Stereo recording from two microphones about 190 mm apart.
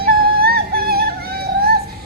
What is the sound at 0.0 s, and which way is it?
Music, 55° right (ahead or behind).